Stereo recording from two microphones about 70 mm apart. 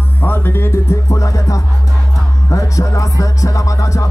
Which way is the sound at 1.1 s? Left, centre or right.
Left.